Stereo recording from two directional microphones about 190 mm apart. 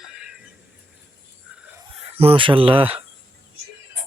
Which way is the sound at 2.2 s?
30° right (ahead or behind).